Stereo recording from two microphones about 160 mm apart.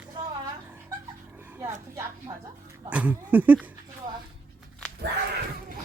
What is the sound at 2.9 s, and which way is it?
Speech, 10° right (ahead or behind).